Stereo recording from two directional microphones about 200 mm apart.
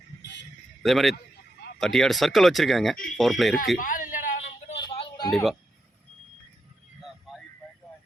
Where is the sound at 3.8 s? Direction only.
40° left (ahead or behind).